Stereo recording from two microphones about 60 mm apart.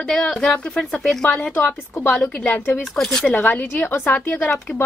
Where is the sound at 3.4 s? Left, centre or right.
Left.